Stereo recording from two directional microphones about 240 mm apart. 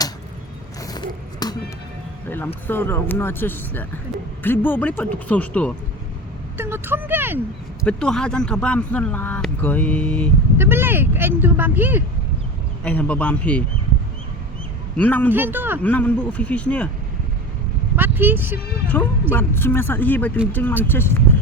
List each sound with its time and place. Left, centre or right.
0.8 s a sound: centre
2.6 s speech: centre
6.6 s speech: centre
7.9 s speech: centre
10.6 s speech: centre
12.8 s speech: centre
14.9 s speech: centre
15.3 s speech: centre
15.8 s speech: centre
17.9 s speech: centre
18.9 s speech: centre